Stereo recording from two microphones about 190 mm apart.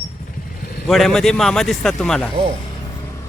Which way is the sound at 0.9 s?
Centre (ahead or behind).